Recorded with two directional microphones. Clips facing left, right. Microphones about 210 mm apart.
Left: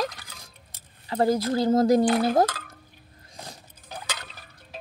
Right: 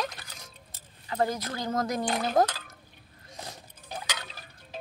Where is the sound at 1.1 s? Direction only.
30° left (ahead or behind).